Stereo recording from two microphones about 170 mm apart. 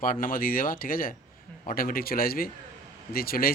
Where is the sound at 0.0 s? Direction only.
55° left (ahead or behind).